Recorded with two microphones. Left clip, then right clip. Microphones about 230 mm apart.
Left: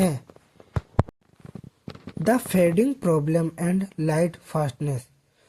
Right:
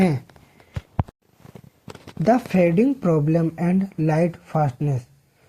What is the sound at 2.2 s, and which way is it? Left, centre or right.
Speech, left.